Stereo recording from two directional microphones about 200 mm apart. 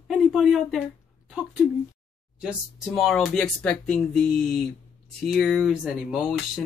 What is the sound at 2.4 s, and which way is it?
Speech, 5° right (ahead or behind).